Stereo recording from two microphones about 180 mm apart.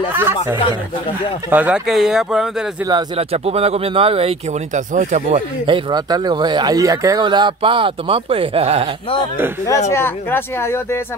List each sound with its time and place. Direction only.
0.1 s speech: 10° right (ahead or behind)
2.8 s speech: 25° right (ahead or behind); by 5.4 s 40° right (ahead or behind)
5.7 s speech: 25° right (ahead or behind)
9.8 s speech: 15° left (ahead or behind)